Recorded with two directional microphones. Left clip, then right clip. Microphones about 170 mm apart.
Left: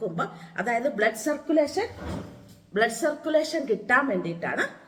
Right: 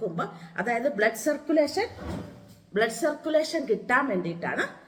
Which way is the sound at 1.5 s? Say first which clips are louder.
Left 1 dB; 20° right (ahead or behind).